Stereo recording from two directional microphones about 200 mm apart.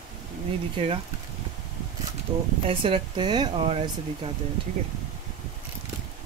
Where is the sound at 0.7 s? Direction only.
30° right (ahead or behind).